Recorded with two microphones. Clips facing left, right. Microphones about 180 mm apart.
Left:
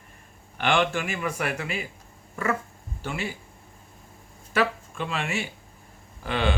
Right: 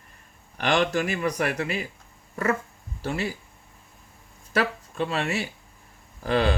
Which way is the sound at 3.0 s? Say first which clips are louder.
Right 3 dB; 35° right (ahead or behind).